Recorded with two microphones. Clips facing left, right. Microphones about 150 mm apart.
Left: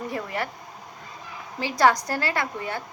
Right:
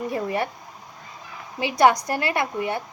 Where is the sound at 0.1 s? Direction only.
25° right (ahead or behind).